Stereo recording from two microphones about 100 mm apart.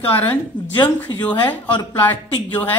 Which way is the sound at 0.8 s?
15° left (ahead or behind).